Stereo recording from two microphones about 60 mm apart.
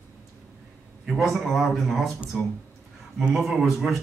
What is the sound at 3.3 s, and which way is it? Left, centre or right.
Speech, centre.